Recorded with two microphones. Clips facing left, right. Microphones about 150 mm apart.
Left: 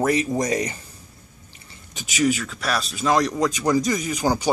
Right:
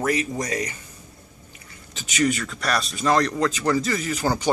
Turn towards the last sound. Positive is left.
turn(degrees=10)  # may be behind; listen again after turning